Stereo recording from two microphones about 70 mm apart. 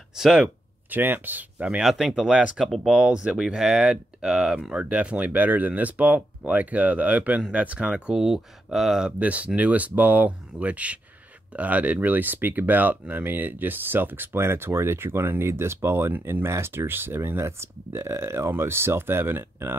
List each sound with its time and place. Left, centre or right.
0.2 s speech: centre
0.8 s speech: right
1.8 s speech: centre
9.2 s speech: right